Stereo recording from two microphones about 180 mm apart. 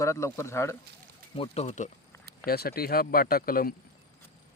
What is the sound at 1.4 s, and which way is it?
Speech, 35° left (ahead or behind).